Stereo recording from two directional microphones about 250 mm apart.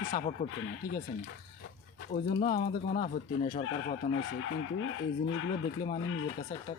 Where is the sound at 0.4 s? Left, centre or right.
Left.